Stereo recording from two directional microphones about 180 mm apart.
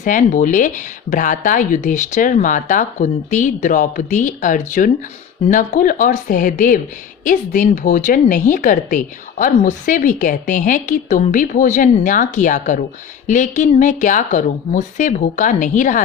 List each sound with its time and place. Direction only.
0.0 s a woman's voice: 45° left (ahead or behind)